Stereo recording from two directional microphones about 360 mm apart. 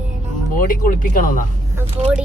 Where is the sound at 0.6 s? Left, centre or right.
Left.